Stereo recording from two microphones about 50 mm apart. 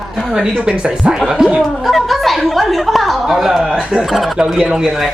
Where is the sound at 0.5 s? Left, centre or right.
Centre.